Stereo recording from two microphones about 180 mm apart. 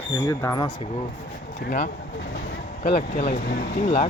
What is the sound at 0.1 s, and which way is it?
Speech, 20° left (ahead or behind).